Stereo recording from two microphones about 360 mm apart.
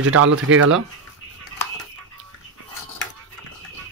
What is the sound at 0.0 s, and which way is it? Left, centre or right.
Speech, right.